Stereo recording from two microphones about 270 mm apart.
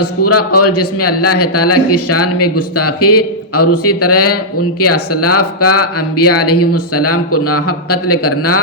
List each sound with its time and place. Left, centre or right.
0.0 s a man's voice: left